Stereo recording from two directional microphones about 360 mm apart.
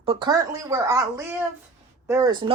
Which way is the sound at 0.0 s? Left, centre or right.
Centre.